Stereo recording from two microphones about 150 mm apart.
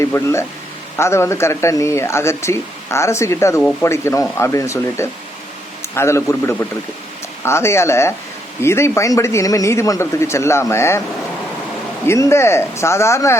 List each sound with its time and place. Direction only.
0.0 s speech: 20° left (ahead or behind)
3.6 s speech: 5° left (ahead or behind)
3.8 s a man's voice: 20° left (ahead or behind)
12.0 s speech: 20° left (ahead or behind)